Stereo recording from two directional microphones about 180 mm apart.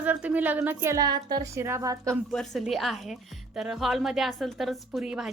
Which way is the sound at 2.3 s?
Centre (ahead or behind).